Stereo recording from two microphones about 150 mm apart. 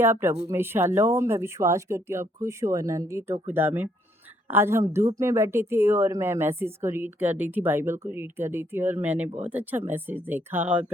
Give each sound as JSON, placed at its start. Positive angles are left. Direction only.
{"t": 0.0, "sound": "speech", "side_deg": -15}